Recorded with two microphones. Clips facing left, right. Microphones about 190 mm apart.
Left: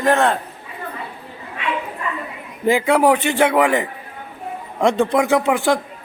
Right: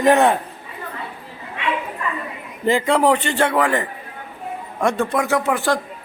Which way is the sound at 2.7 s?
5° left (ahead or behind).